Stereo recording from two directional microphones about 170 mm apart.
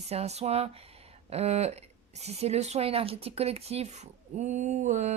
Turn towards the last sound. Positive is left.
turn(degrees=-45)  # may be behind; listen again after turning